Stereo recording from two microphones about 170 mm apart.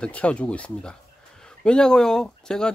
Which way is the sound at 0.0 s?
5° left (ahead or behind).